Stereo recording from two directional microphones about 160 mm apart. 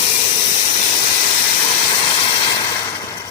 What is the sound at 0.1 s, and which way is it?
Steam, 35° left (ahead or behind).